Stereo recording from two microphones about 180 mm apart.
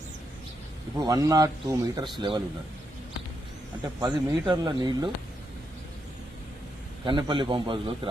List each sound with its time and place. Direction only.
0.9 s speech: 20° right (ahead or behind)
4.0 s speech: 20° right (ahead or behind)
7.0 s speech: 25° right (ahead or behind)